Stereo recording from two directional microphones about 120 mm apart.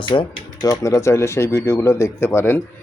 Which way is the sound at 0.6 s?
30° left (ahead or behind).